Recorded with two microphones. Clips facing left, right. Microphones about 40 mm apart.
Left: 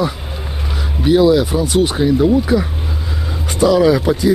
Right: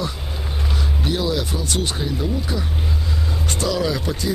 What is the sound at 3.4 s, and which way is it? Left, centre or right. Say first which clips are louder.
Speech: left 11 dB; centre.